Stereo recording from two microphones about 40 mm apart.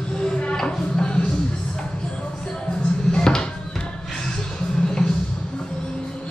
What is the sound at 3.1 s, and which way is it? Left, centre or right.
Music, centre.